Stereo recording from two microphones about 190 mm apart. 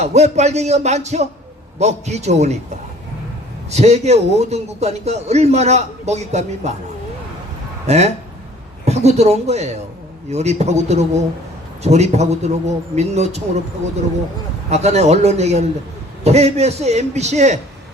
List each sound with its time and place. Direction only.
0.0 s a man's voice: 35° right (ahead or behind)
3.7 s a man's voice: 35° right (ahead or behind)
7.9 s a man's voice: 35° right (ahead or behind)
14.7 s a man's voice: 35° right (ahead or behind)